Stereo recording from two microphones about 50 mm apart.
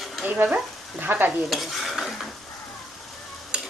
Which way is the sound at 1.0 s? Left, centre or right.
Right.